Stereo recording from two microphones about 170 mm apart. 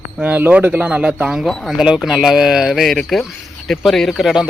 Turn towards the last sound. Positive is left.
turn(degrees=0)  # may be behind; listen again after turning